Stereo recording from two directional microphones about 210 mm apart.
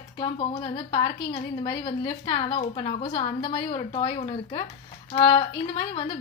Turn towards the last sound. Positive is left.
turn(degrees=25)  # may be behind; listen again after turning